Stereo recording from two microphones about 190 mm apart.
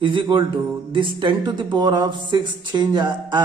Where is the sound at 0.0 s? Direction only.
25° right (ahead or behind).